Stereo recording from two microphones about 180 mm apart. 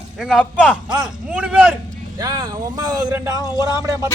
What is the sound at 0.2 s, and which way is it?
A man's voice, centre (ahead or behind).